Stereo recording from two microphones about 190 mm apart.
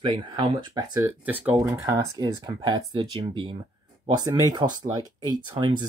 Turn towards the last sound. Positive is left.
turn(degrees=-25)  # may be behind; listen again after turning